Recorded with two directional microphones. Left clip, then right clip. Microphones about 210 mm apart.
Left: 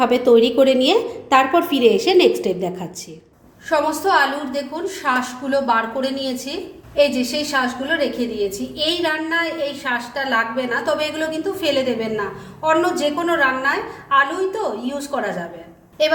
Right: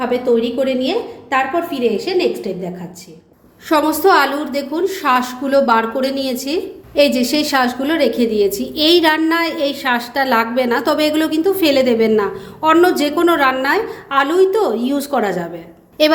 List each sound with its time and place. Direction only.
0.0 s a woman's voice: 25° left (ahead or behind)
3.7 s a woman's voice: 35° right (ahead or behind)